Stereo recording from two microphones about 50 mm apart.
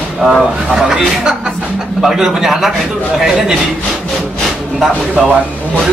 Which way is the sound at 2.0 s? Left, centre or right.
Centre.